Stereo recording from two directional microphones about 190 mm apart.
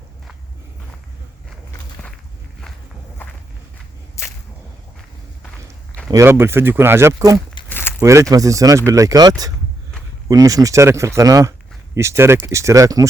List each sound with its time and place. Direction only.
6.1 s speech: 15° right (ahead or behind)
7.7 s a sound: 10° left (ahead or behind)
8.0 s speech: 15° right (ahead or behind)